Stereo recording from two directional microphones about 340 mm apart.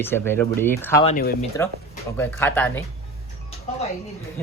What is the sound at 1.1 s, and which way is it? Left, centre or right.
Speech, left.